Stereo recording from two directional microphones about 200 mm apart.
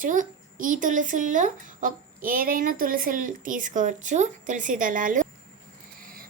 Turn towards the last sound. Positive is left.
turn(degrees=-40)  # may be behind; listen again after turning